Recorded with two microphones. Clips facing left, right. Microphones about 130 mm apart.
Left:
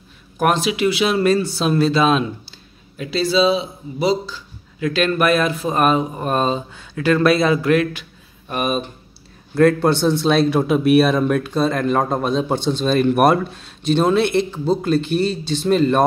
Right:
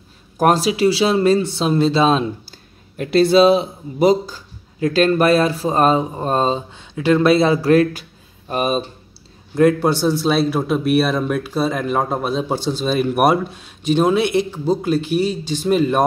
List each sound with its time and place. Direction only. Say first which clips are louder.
0.4 s speech: right 3 dB; 40° right (ahead or behind)
3.0 s speech: right 5 dB; 55° right (ahead or behind)
4.7 s speech: right 3 dB; 35° right (ahead or behind)
9.6 s a man's voice: even; 15° right (ahead or behind)